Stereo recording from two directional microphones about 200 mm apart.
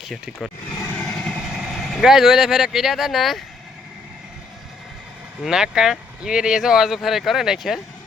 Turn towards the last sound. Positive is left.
turn(degrees=0)  # may be behind; listen again after turning